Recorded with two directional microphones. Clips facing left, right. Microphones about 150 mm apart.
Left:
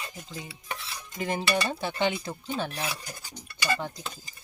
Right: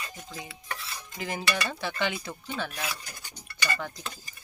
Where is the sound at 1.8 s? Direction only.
20° left (ahead or behind).